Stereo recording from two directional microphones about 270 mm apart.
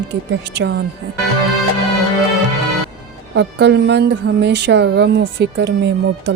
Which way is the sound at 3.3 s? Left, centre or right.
Right.